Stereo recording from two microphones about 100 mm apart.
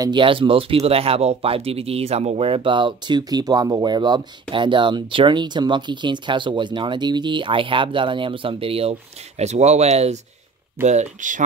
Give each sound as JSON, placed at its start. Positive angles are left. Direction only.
{"t": 0.1, "sound": "speech", "side_deg": -60}
{"t": 9.4, "sound": "speech", "side_deg": -90}
{"t": 10.8, "sound": "speech", "side_deg": -20}